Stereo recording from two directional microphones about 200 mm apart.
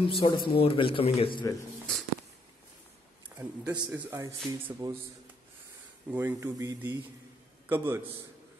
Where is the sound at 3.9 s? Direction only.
15° right (ahead or behind).